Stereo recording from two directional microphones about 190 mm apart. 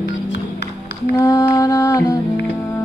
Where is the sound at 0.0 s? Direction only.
65° left (ahead or behind).